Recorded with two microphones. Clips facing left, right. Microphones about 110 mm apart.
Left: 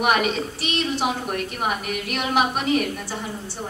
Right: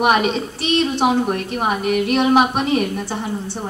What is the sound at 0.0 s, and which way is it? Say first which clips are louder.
A woman's voice: right 4 dB; 25° right (ahead or behind).